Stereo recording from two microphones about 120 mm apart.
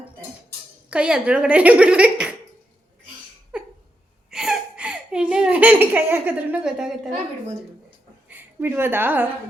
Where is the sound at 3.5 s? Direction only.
10° right (ahead or behind).